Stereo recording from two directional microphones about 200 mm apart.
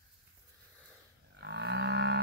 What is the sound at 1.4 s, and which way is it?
Whale vocalization, 55° right (ahead or behind).